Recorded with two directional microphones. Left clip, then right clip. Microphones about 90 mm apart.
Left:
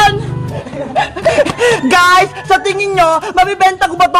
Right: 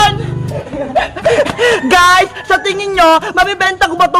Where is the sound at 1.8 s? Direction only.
35° right (ahead or behind).